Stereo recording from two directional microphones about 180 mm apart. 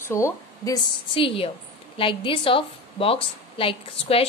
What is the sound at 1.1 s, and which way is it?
A woman's voice, 30° left (ahead or behind).